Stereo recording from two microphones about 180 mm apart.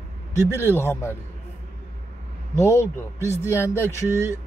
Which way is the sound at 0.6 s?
10° left (ahead or behind).